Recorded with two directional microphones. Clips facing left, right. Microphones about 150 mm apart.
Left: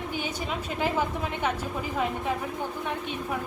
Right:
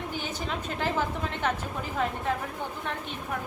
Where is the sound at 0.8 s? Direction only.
10° left (ahead or behind).